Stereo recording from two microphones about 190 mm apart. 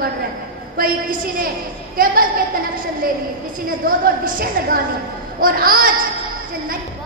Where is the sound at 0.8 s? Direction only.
45° right (ahead or behind).